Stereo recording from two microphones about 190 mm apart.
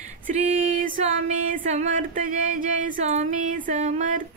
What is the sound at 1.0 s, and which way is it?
Speech, 35° right (ahead or behind).